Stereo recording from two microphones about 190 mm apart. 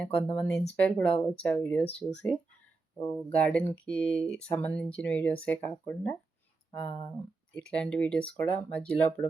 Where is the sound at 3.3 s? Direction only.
5° left (ahead or behind).